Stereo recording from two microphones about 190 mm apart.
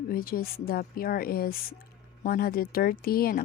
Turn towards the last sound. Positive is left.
turn(degrees=50)  # may be behind; listen again after turning